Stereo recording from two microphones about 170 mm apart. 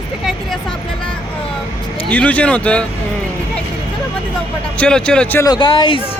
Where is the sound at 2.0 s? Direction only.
10° left (ahead or behind).